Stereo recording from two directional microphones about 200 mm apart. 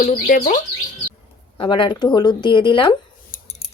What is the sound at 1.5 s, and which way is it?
Speech, 25° left (ahead or behind).